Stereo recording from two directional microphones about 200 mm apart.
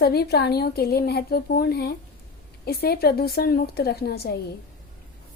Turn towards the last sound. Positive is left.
turn(degrees=50)  # may be behind; listen again after turning